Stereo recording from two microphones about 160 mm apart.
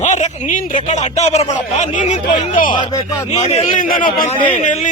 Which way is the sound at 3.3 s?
45° left (ahead or behind).